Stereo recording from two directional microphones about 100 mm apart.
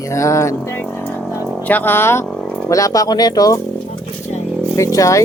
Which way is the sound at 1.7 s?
20° left (ahead or behind).